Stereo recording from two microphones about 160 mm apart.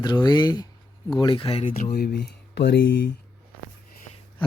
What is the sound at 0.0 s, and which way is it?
Speech, 25° left (ahead or behind).